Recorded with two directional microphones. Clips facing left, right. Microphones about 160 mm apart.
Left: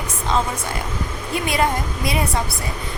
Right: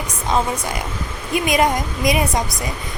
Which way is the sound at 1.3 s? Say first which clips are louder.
Right 4 dB; 15° right (ahead or behind).